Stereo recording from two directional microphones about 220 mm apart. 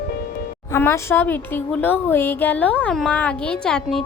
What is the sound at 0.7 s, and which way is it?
A woman's voice, 10° left (ahead or behind).